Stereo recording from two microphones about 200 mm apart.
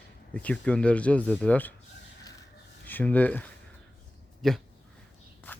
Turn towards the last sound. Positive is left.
turn(degrees=10)  # may be behind; listen again after turning